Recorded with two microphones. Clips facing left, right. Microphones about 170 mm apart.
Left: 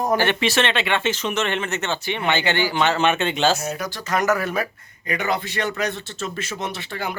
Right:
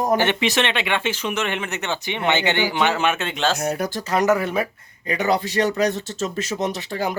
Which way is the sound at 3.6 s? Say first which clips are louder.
Right 4 dB; 60° right (ahead or behind).